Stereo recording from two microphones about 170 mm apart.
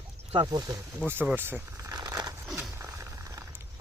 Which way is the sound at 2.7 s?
15° right (ahead or behind).